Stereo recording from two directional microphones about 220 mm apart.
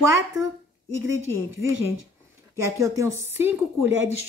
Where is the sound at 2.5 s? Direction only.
15° right (ahead or behind).